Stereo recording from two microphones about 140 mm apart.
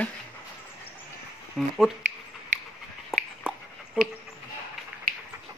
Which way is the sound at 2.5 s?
65° right (ahead or behind).